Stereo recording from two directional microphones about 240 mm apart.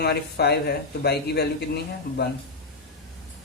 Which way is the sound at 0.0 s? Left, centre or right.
Left.